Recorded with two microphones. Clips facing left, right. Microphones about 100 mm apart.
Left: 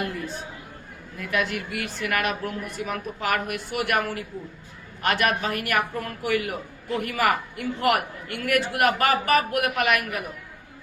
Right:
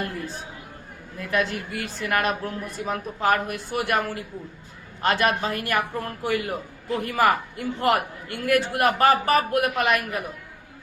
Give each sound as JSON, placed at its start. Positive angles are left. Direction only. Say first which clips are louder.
{"t": 1.2, "sound": "a man's voice", "louder": "right 1 dB", "side_deg": -35}